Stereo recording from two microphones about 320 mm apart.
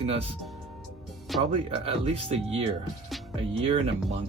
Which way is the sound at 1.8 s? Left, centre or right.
Centre.